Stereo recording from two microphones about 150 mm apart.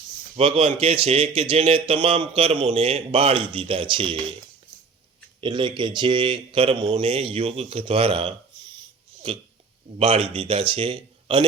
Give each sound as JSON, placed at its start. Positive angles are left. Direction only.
{"t": 0.3, "sound": "a man's voice", "side_deg": -40}
{"t": 5.4, "sound": "a man's voice", "side_deg": -30}